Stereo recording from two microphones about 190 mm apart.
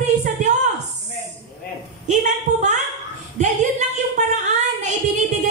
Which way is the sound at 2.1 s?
40° right (ahead or behind).